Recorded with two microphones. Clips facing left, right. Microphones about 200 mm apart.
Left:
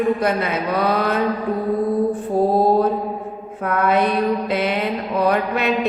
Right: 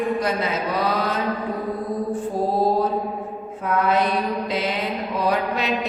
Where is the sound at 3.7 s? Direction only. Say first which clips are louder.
Left 2 dB; 60° left (ahead or behind).